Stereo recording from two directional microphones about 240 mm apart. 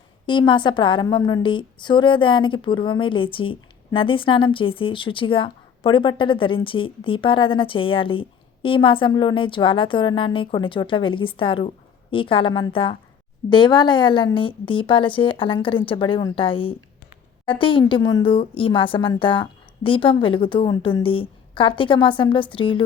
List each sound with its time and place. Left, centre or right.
0.3 s a woman's voice: centre